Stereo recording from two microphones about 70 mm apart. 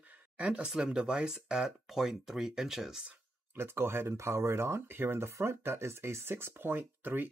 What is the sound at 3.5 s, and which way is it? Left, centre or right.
Speech, right.